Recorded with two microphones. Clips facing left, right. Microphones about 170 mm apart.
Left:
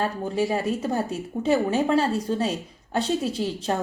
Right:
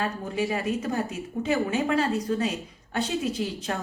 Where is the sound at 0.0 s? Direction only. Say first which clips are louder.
Left 3 dB; 35° left (ahead or behind).